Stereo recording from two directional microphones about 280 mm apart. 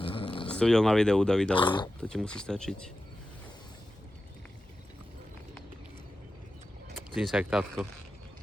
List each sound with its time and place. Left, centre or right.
0.0 s a sound: centre
0.4 s speech: centre
1.5 s speech: centre
2.0 s speech: centre
7.1 s speech: centre